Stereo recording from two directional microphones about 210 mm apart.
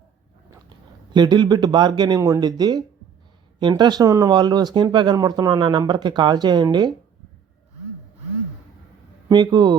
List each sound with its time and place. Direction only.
1.1 s speech: 20° right (ahead or behind)
9.3 s speech: 20° right (ahead or behind)